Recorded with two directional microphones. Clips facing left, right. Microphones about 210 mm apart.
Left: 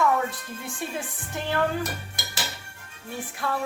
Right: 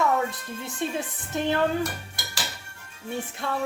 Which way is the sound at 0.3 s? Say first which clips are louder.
Right 1 dB; 20° right (ahead or behind).